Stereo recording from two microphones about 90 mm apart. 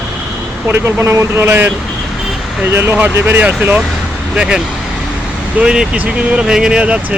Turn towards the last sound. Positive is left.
turn(degrees=-15)  # may be behind; listen again after turning